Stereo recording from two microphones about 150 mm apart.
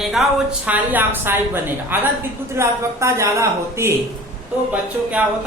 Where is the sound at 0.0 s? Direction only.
Centre (ahead or behind).